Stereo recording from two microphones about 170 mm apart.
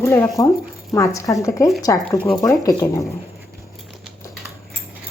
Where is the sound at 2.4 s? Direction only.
20° left (ahead or behind).